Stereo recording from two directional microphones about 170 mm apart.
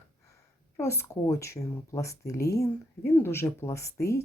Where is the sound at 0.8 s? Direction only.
15° left (ahead or behind).